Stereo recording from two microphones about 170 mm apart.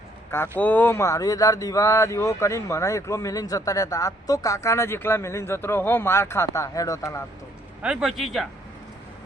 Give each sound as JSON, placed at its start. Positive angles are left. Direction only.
{"t": 0.3, "sound": "speech", "side_deg": 15}
{"t": 7.8, "sound": "a man's voice", "side_deg": -5}